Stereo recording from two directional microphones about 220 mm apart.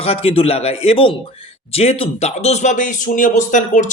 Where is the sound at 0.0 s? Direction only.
25° left (ahead or behind).